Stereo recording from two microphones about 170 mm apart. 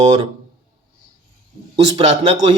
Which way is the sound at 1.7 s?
30° right (ahead or behind).